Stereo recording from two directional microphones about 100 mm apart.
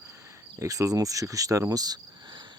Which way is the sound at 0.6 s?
35° right (ahead or behind).